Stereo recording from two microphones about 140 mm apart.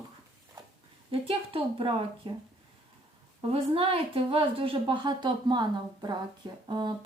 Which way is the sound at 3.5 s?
40° right (ahead or behind).